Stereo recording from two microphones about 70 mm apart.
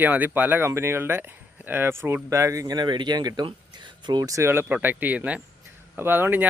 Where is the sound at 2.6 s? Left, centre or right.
Right.